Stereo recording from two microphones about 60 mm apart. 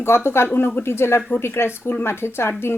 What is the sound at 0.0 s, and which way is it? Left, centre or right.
A woman's voice, left.